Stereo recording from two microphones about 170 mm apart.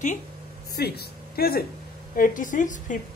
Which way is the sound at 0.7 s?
70° left (ahead or behind).